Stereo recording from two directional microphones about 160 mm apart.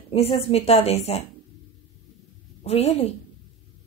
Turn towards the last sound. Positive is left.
turn(degrees=40)  # may be behind; listen again after turning